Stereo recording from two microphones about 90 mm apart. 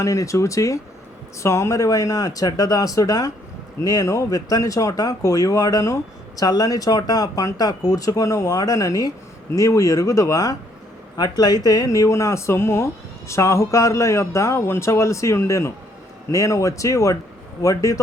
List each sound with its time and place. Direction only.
0.0 s speech: 40° left (ahead or behind)